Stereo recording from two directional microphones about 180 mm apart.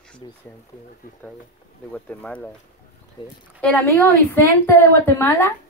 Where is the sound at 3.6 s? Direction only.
10° left (ahead or behind).